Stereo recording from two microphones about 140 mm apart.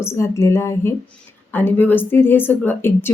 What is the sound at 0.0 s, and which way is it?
A woman's voice, 20° left (ahead or behind).